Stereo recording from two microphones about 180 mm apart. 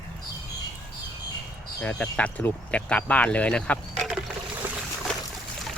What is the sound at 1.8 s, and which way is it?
Speech, 5° left (ahead or behind).